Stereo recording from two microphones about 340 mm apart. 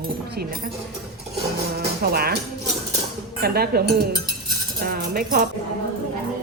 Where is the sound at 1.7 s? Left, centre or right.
Right.